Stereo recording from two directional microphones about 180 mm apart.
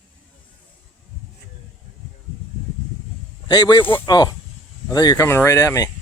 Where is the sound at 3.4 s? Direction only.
25° left (ahead or behind).